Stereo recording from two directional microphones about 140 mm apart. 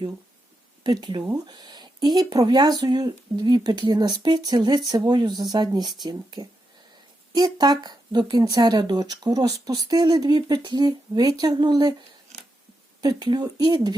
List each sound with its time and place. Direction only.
0.9 s speech: 30° right (ahead or behind)